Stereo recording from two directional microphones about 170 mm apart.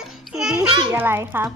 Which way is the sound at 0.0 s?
5° right (ahead or behind).